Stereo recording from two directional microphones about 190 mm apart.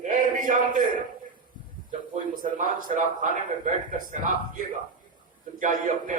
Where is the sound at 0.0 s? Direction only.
45° right (ahead or behind).